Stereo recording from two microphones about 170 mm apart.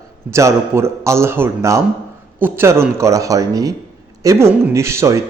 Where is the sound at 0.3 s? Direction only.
15° right (ahead or behind).